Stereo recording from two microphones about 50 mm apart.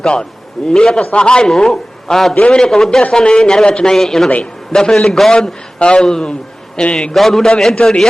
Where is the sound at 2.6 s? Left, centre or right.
Centre.